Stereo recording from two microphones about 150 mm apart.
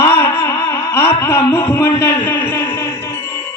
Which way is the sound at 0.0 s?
15° left (ahead or behind).